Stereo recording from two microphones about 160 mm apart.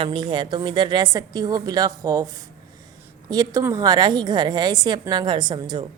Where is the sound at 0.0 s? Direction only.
30° right (ahead or behind).